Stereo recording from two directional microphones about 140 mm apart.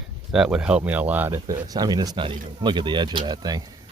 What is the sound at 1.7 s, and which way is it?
Speech, 30° right (ahead or behind).